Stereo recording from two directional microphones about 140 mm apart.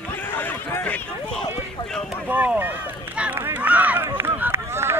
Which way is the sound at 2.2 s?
15° right (ahead or behind).